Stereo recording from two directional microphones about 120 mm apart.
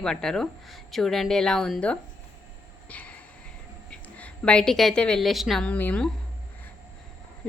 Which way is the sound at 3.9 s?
10° left (ahead or behind).